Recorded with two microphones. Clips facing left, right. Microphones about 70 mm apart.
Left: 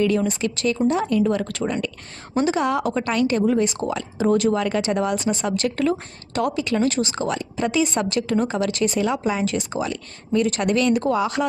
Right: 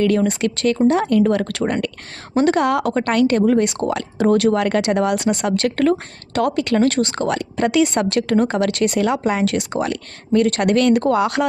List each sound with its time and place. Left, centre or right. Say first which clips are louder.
0.3 s a woman's voice: right 4 dB; right